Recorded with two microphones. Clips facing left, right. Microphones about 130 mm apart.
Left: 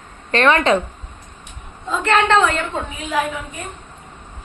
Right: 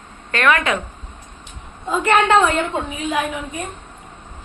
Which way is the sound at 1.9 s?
10° right (ahead or behind).